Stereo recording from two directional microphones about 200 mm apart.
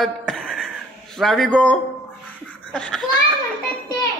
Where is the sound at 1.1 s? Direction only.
Centre (ahead or behind).